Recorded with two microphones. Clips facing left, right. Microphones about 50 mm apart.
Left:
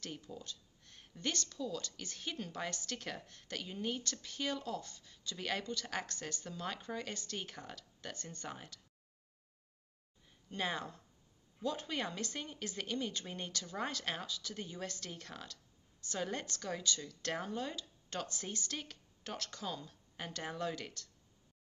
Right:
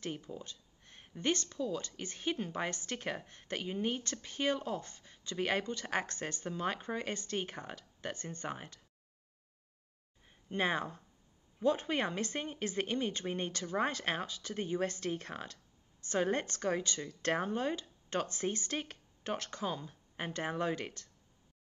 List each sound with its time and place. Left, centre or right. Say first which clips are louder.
0.0 s speech: right 5 dB; right
10.2 s speech: right 5 dB; right